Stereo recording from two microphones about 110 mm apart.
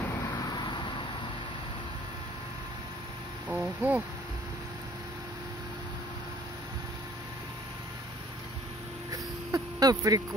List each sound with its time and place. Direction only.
0.2 s vehicle: 35° left (ahead or behind)
3.4 s speech: 15° right (ahead or behind)
9.1 s a sound: 35° right (ahead or behind)